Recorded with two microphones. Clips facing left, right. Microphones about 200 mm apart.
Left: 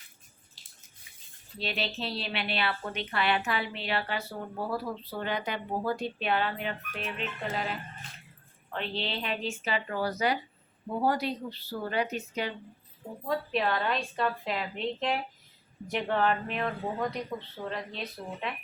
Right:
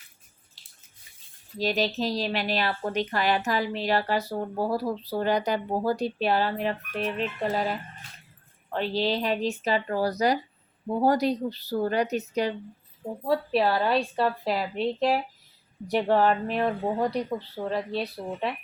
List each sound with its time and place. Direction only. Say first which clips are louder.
1.5 s speech: right 8 dB; 40° right (ahead or behind)